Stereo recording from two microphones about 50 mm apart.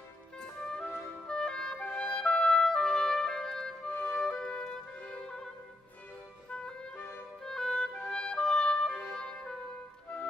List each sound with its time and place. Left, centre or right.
0.7 s music: centre
6.5 s music: centre